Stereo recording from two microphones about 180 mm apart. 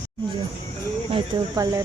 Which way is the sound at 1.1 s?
20° right (ahead or behind).